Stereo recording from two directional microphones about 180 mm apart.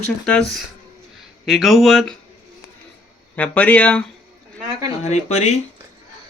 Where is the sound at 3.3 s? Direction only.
10° left (ahead or behind).